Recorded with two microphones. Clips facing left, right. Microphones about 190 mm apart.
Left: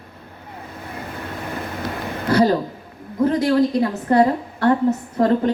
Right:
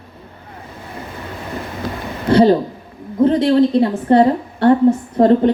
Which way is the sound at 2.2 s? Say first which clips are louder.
Right 5 dB; 25° right (ahead or behind).